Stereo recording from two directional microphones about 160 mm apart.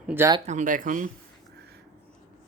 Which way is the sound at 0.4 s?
50° right (ahead or behind).